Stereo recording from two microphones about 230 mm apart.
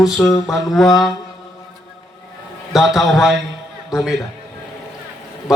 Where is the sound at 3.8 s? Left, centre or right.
Centre.